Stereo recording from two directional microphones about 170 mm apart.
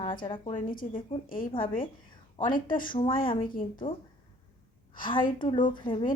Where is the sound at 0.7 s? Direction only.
55° left (ahead or behind).